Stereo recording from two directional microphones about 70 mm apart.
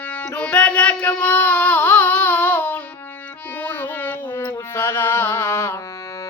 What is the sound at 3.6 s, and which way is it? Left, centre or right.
Music, left.